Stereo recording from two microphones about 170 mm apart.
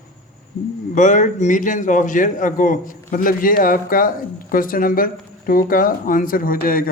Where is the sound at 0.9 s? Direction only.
50° left (ahead or behind).